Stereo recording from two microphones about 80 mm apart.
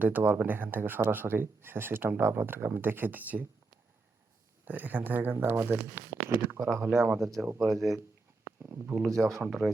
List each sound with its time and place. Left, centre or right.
0.0 s speech: right
4.6 s speech: right
7.2 s speech: centre
8.4 s speech: right
9.1 s speech: centre